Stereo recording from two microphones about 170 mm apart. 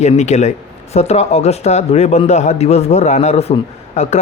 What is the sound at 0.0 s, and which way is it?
A man's voice, 40° left (ahead or behind).